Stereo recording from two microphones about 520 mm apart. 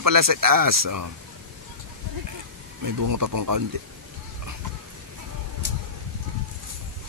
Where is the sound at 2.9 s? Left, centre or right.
Right.